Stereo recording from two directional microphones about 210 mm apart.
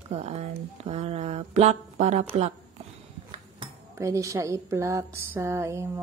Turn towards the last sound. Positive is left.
turn(degrees=-15)  # may be behind; listen again after turning